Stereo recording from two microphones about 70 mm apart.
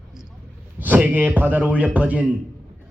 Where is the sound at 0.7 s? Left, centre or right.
Right.